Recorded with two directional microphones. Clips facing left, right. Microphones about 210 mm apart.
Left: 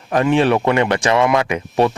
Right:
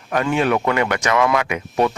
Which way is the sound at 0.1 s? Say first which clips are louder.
Left 4 dB; 30° left (ahead or behind).